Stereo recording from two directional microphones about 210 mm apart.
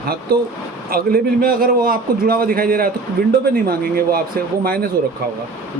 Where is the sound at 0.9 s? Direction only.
45° right (ahead or behind).